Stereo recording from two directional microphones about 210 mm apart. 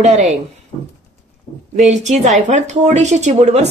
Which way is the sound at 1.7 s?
30° right (ahead or behind).